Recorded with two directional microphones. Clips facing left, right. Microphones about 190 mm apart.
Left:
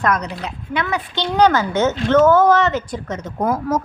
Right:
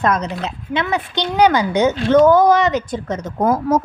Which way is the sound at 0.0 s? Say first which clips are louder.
Right 2 dB; 25° right (ahead or behind).